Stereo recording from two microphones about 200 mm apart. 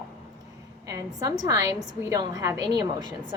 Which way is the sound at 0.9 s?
15° right (ahead or behind).